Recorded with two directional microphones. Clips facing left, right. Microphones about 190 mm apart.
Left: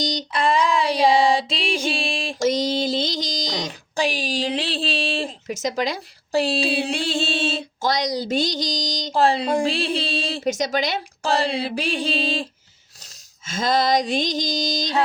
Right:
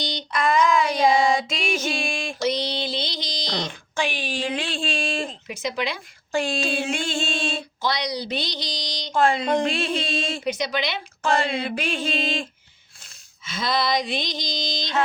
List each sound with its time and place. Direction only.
0.0 s speech: 40° left (ahead or behind)
2.4 s speech: 45° left (ahead or behind)
13.4 s a sound: 45° left (ahead or behind)